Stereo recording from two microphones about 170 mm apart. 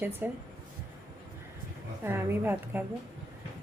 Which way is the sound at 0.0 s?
10° right (ahead or behind).